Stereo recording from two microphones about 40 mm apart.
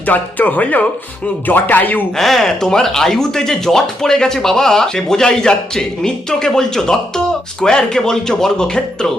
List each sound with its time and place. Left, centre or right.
0.0 s speech: left
2.1 s speech: centre